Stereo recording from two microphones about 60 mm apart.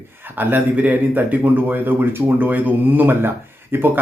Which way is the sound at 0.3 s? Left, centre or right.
Right.